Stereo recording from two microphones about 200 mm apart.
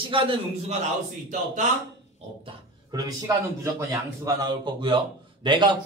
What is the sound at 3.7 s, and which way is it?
A man's voice, 15° right (ahead or behind).